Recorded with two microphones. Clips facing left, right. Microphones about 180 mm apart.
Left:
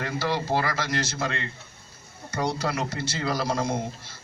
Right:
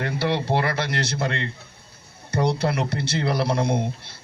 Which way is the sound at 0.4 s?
65° right (ahead or behind).